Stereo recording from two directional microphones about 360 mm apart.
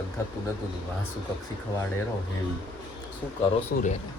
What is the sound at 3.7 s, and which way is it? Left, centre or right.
Speech, left.